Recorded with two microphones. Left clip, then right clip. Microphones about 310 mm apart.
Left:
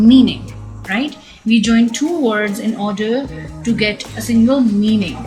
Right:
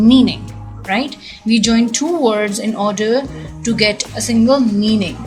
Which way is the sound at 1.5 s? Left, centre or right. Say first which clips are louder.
Even; centre.